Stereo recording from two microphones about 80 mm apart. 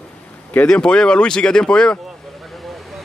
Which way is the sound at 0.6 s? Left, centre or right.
Centre.